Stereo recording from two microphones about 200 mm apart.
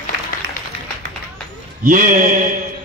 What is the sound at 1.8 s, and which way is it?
Speech, 40° right (ahead or behind).